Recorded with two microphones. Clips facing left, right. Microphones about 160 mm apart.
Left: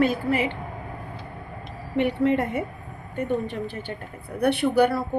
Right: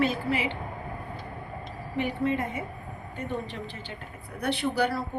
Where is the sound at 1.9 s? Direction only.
70° left (ahead or behind).